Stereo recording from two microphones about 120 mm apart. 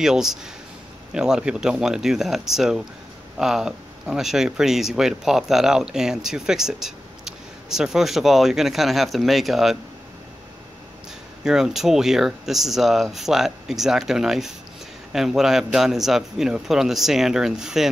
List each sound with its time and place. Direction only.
0.0 s speech: 5° right (ahead or behind)
11.4 s speech: 5° right (ahead or behind)